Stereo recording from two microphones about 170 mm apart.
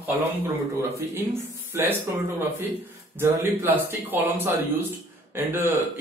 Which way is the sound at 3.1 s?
10° right (ahead or behind).